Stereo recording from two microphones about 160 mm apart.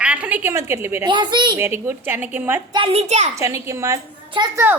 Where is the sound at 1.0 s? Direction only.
30° right (ahead or behind).